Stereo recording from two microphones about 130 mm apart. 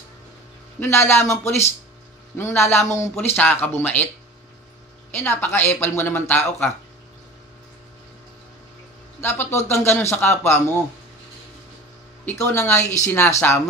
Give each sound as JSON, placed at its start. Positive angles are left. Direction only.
{"t": 0.7, "sound": "speech", "side_deg": 20}
{"t": 5.1, "sound": "speech", "side_deg": 15}
{"t": 9.2, "sound": "speech", "side_deg": 20}
{"t": 12.3, "sound": "speech", "side_deg": 20}